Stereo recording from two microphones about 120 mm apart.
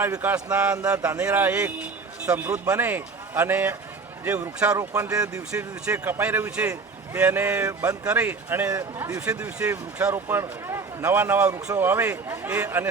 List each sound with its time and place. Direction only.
0.0 s a man's voice: 15° right (ahead or behind)
4.8 s speech: 25° right (ahead or behind)
5.8 s a man's voice: 15° right (ahead or behind)